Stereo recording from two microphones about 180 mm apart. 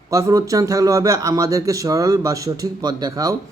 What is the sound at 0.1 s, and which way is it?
Speech, 20° right (ahead or behind).